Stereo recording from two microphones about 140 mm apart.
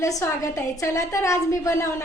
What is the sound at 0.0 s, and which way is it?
A woman's voice, 25° left (ahead or behind).